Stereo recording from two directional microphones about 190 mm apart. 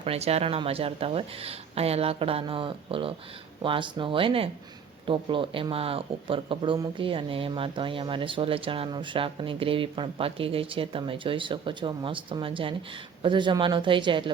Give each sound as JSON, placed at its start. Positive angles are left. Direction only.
{"t": 0.0, "sound": "speech", "side_deg": -30}